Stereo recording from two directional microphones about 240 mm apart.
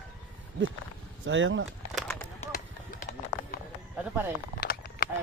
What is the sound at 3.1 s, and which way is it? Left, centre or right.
Run, left.